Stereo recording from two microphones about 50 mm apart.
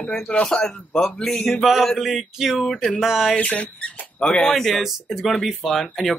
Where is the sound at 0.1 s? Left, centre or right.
Centre.